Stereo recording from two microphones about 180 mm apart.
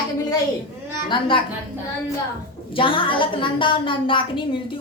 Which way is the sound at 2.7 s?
30° left (ahead or behind).